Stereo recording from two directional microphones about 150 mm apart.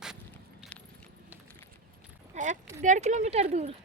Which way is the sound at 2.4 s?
55° right (ahead or behind).